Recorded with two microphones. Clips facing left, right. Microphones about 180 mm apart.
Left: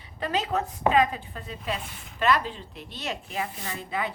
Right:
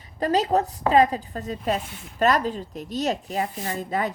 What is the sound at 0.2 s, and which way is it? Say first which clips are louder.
A woman's voice: right 6 dB; 40° right (ahead or behind).